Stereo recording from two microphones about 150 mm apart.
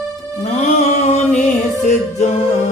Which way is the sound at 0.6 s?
50° left (ahead or behind).